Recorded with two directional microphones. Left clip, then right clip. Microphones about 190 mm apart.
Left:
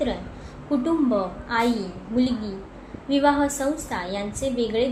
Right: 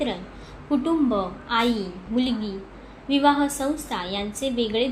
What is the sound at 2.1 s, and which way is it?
Speech, 60° right (ahead or behind).